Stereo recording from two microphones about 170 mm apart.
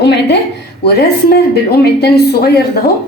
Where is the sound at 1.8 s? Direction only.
70° left (ahead or behind).